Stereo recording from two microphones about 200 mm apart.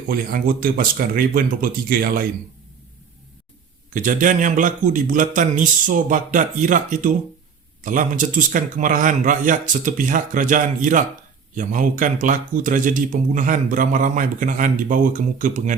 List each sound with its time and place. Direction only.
0.1 s speech: 45° right (ahead or behind)
3.9 s speech: 40° right (ahead or behind)